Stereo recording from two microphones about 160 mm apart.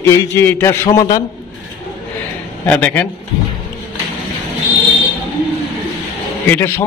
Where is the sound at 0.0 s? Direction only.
15° left (ahead or behind).